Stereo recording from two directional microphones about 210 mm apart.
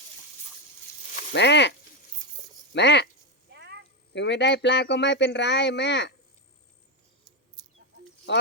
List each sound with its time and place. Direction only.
1.3 s speech: 55° left (ahead or behind)
2.7 s speech: 55° left (ahead or behind)
3.5 s a sound: 55° right (ahead or behind)
4.1 s speech: 55° left (ahead or behind)
7.6 s mouse: 20° right (ahead or behind)
8.3 s speech: 55° left (ahead or behind)